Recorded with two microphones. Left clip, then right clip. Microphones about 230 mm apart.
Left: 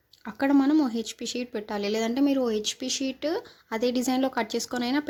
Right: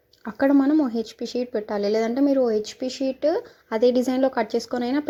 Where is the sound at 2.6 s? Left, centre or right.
Centre.